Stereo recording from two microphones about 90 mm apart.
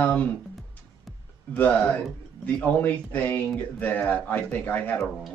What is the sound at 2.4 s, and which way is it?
Speech, 20° left (ahead or behind).